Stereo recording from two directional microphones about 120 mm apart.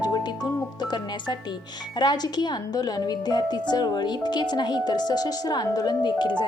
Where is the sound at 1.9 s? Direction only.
35° left (ahead or behind).